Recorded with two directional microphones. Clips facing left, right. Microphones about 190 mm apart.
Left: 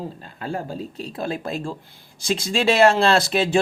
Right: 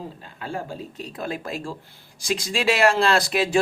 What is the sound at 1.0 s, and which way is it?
Speech, 30° left (ahead or behind).